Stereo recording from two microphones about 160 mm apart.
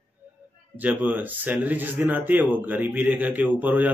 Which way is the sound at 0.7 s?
10° right (ahead or behind).